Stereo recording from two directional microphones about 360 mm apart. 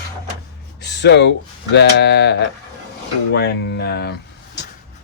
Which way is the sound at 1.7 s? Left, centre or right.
Left.